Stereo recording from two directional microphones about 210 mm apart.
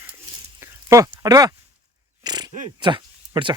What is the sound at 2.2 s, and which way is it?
Speech, 20° right (ahead or behind).